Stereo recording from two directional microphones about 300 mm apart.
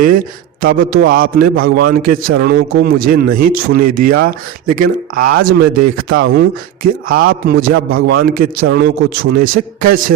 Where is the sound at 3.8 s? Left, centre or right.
Right.